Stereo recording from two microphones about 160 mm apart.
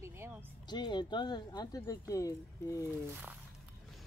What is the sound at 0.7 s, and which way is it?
Speech, 30° left (ahead or behind).